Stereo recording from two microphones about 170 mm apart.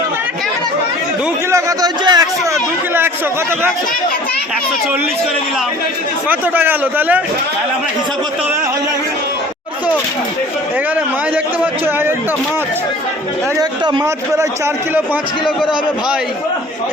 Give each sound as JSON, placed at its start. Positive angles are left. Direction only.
{"t": 1.5, "sound": "a man's voice", "side_deg": -20}
{"t": 6.2, "sound": "a man's voice", "side_deg": -10}
{"t": 11.6, "sound": "a man's voice", "side_deg": -10}
{"t": 13.6, "sound": "a man's voice", "side_deg": -25}